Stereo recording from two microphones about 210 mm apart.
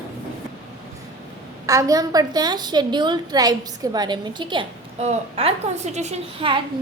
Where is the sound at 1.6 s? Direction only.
15° right (ahead or behind).